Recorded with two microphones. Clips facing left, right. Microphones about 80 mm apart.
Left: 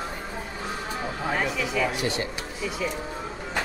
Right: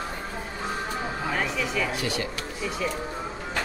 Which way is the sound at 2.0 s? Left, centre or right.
Left.